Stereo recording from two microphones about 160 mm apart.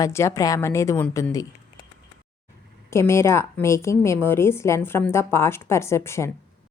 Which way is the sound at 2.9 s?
15° left (ahead or behind).